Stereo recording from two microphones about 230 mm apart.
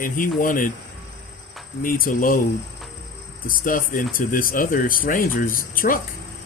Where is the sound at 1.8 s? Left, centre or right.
Left.